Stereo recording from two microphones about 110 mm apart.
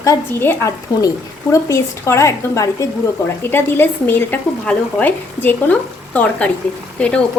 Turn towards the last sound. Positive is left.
turn(degrees=10)  # may be behind; listen again after turning